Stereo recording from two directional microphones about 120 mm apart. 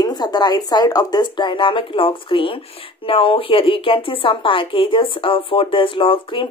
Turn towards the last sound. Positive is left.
turn(degrees=45)  # may be behind; listen again after turning